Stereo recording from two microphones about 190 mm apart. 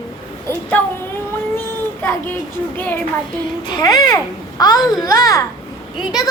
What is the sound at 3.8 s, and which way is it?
A child's voice, 20° left (ahead or behind).